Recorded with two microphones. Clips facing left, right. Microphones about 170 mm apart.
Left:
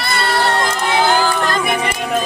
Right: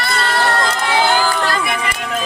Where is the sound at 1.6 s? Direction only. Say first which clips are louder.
Left 3 dB; 35° left (ahead or behind).